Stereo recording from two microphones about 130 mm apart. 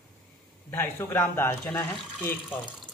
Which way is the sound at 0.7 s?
15° left (ahead or behind).